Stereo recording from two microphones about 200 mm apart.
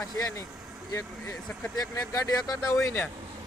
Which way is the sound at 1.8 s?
15° left (ahead or behind).